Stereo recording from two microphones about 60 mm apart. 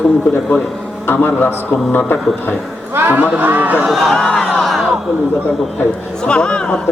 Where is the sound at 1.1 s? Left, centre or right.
Left.